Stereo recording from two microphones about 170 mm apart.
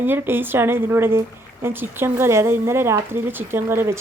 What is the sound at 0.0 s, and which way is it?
Speech, 10° right (ahead or behind).